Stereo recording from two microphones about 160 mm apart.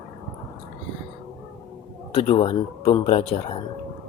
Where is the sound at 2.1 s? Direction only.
40° left (ahead or behind).